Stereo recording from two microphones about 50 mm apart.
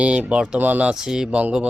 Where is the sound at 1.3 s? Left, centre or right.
Right.